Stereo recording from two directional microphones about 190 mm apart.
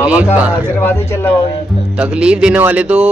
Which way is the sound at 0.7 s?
10° left (ahead or behind).